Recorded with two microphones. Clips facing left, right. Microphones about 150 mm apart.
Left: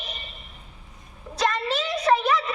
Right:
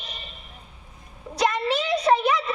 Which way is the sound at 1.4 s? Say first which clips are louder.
Right 2 dB; 15° right (ahead or behind).